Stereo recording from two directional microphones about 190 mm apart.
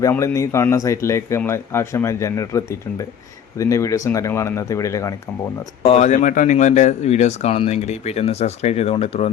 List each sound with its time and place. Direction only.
0.0 s a man's voice: 15° left (ahead or behind)
5.8 s speech: 35° left (ahead or behind)